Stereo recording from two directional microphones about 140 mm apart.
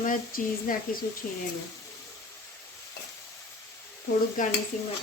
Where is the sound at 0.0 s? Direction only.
80° left.